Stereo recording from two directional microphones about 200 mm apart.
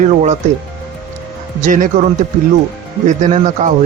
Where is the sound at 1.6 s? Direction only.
40° right (ahead or behind).